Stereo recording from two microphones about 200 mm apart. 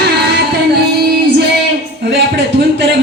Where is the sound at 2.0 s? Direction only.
55° right (ahead or behind).